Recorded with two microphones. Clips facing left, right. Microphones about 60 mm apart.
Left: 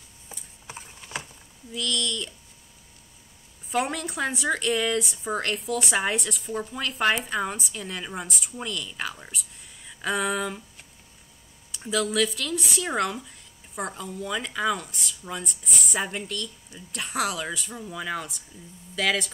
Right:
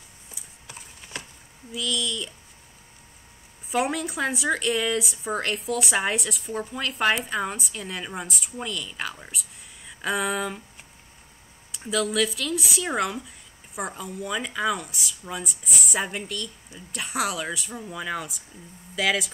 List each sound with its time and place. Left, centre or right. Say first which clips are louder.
0.7 s a sound: left 3 dB; left
1.7 s speech: even; centre
3.7 s speech: right 2 dB; centre
11.7 s speech: even; centre